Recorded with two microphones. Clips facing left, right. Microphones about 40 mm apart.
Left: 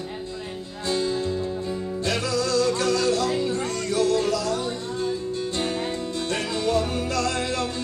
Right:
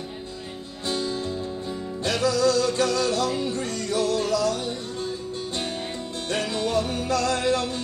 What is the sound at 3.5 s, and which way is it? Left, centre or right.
Music, left.